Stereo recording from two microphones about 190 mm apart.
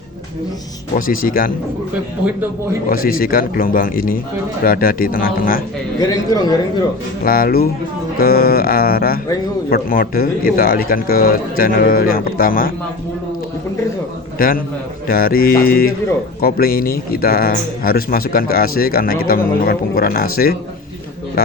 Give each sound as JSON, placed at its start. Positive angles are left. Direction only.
{"t": 0.9, "sound": "a man's voice", "side_deg": 50}
{"t": 2.9, "sound": "a man's voice", "side_deg": 50}
{"t": 6.3, "sound": "speech", "side_deg": 20}
{"t": 7.3, "sound": "a man's voice", "side_deg": 50}
{"t": 14.3, "sound": "a man's voice", "side_deg": 50}